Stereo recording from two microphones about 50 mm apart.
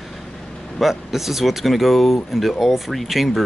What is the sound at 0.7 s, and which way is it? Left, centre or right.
Speech, centre.